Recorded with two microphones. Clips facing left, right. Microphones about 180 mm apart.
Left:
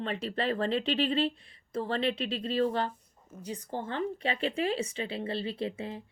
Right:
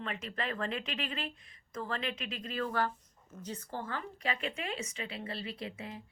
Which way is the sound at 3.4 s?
15° left (ahead or behind).